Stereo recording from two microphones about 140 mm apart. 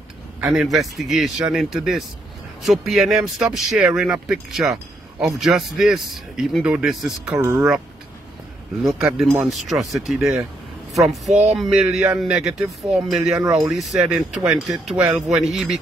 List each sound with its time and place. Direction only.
0.4 s speech: 5° right (ahead or behind)
7.3 s speech: 20° right (ahead or behind)
8.8 s speech: 5° right (ahead or behind)